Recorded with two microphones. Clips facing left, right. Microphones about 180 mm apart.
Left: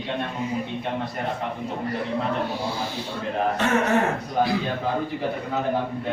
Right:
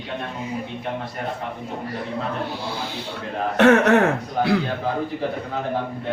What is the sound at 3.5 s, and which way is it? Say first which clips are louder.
Speech: right 10 dB; 70° right (ahead or behind).